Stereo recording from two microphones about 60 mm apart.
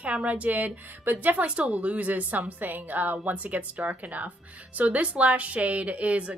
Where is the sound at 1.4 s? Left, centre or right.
Centre.